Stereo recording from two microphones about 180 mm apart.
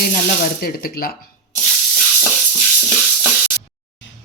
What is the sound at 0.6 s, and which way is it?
Speech, 55° left (ahead or behind).